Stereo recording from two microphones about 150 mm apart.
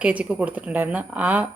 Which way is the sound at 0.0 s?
10° right (ahead or behind).